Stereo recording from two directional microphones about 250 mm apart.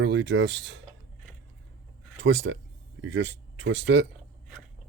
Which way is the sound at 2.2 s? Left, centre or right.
Right.